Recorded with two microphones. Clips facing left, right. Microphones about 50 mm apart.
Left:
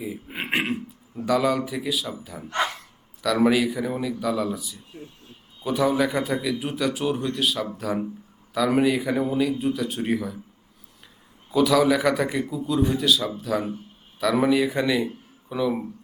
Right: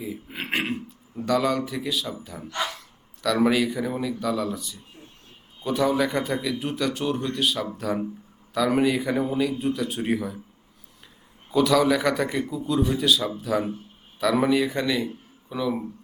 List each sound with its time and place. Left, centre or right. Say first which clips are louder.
0.0 s a man's voice: left 1 dB; centre
1.1 s a man's voice: left 1 dB; centre
2.5 s dog: left 4 dB; left
3.2 s a man's voice: left 1 dB; centre
11.5 s a man's voice: left 1 dB; centre